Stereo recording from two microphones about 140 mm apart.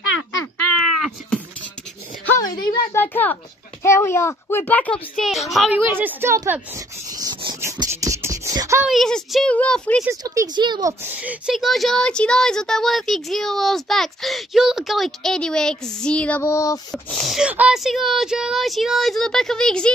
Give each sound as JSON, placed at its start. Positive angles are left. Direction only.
{"t": 0.7, "sound": "cat", "side_deg": 0}
{"t": 2.3, "sound": "a woman's voice", "side_deg": 30}
{"t": 2.9, "sound": "a child's voice", "side_deg": 15}
{"t": 5.8, "sound": "a woman's voice", "side_deg": -15}
{"t": 7.1, "sound": "a sound", "side_deg": -25}
{"t": 8.8, "sound": "speech", "side_deg": 0}
{"t": 10.5, "sound": "speech", "side_deg": -30}
{"t": 11.1, "sound": "speech", "side_deg": -10}
{"t": 16.9, "sound": "speech", "side_deg": 0}